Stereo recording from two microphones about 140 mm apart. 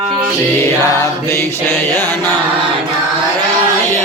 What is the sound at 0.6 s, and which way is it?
Music, 20° left (ahead or behind).